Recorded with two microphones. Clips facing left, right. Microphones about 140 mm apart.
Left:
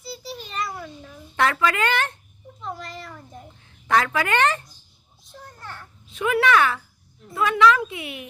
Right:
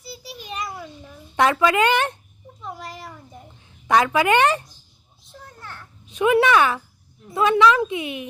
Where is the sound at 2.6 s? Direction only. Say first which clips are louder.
Left 1 dB; 10° right (ahead or behind).